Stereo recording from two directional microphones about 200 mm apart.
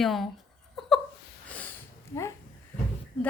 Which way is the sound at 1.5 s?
5° left (ahead or behind).